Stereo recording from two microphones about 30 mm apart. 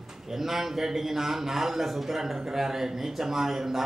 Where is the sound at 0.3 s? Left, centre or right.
Centre.